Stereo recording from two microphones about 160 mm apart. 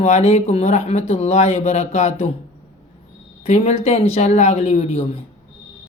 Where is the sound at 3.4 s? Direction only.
45° left (ahead or behind).